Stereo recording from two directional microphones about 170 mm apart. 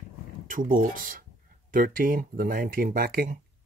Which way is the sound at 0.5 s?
50° right (ahead or behind).